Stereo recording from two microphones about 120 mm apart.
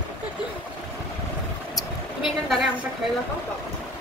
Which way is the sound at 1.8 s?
Centre (ahead or behind).